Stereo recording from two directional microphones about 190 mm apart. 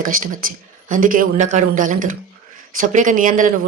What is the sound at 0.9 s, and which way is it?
Speech, 45° right (ahead or behind).